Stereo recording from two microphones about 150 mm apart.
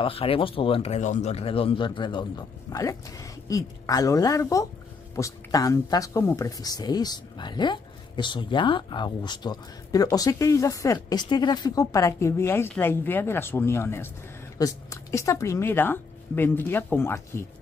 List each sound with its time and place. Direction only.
0.0 s a man's voice: 40° left (ahead or behind); by 17.5 s 15° left (ahead or behind)